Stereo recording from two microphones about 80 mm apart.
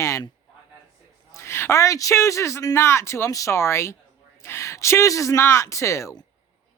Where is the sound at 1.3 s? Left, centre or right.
Left.